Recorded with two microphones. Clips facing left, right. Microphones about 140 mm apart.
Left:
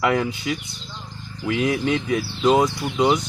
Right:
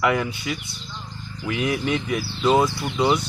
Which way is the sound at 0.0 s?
30° left (ahead or behind).